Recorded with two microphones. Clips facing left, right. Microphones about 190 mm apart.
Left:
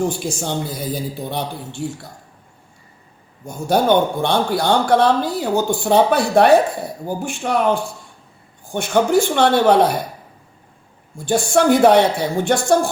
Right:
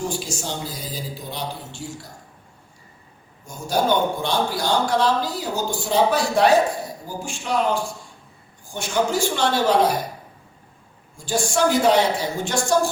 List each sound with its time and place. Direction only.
0.1 s speech: 55° left (ahead or behind)
3.4 s speech: 60° left (ahead or behind)
11.3 s speech: 60° left (ahead or behind)